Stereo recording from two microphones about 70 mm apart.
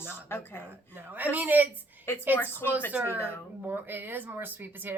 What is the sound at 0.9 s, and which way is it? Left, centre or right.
Speech, right.